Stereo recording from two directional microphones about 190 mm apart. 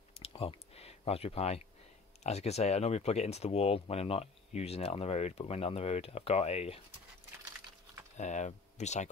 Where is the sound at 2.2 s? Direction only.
35° left (ahead or behind).